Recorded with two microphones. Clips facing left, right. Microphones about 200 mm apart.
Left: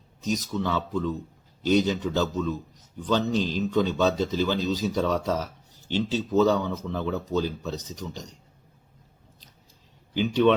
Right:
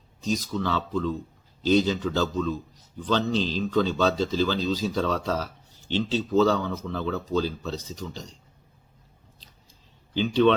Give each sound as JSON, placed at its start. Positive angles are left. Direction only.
{"t": 0.5, "sound": "speech", "side_deg": 15}
{"t": 2.2, "sound": "speech", "side_deg": 0}
{"t": 3.1, "sound": "a man's voice", "side_deg": 10}
{"t": 10.2, "sound": "speech", "side_deg": 10}